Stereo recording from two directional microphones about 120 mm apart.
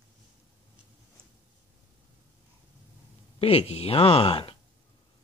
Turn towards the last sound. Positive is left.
turn(degrees=50)  # may be behind; listen again after turning